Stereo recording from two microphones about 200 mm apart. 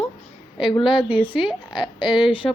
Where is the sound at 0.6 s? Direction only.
25° left (ahead or behind).